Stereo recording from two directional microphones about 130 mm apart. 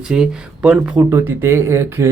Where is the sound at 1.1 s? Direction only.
20° right (ahead or behind).